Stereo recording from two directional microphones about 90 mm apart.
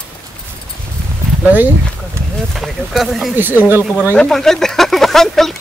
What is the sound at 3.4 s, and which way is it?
Speech, 20° right (ahead or behind).